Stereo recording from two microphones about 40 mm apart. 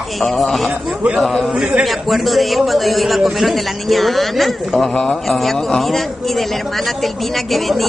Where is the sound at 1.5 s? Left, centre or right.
Right.